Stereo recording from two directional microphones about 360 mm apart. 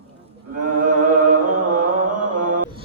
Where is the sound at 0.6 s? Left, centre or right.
Right.